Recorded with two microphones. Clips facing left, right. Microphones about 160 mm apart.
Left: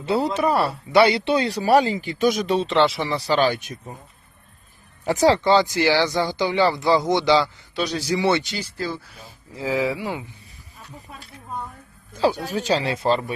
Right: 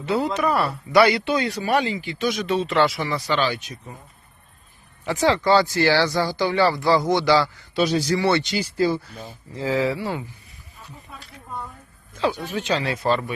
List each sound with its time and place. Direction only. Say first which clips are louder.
0.0 s speech: left 1 dB; 30° left (ahead or behind); by 3.9 s 50° left (ahead or behind)
5.0 s speech: left 3 dB; 40° left (ahead or behind)
5.4 s speech: even; 20° left (ahead or behind)
7.7 s a man's voice: right 5 dB; centre (ahead or behind)
8.0 s speech: even; 15° left (ahead or behind)
8.4 s speech: right 7 dB; 10° right (ahead or behind)
9.5 s speech: right 1 dB; 10° left (ahead or behind)
12.1 s speech: left 3 dB; 35° left (ahead or behind)